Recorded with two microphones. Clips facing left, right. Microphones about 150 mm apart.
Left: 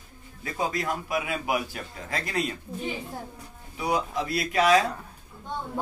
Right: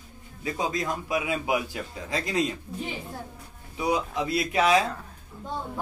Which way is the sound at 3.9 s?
20° right (ahead or behind).